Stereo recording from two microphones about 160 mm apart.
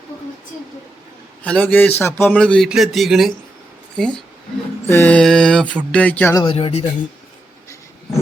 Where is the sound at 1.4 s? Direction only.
10° left (ahead or behind).